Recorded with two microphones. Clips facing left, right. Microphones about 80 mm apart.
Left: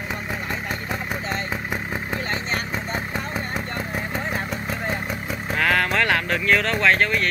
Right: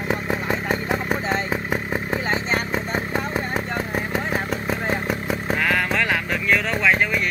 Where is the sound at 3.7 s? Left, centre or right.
Centre.